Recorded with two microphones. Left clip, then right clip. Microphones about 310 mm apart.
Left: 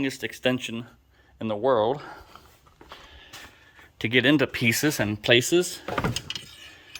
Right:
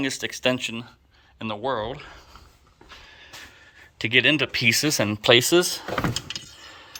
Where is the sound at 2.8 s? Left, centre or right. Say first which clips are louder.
Right 1 dB; centre.